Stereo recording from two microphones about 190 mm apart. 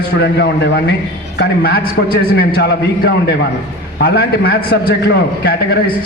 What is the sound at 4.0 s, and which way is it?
A man's voice, 55° left (ahead or behind).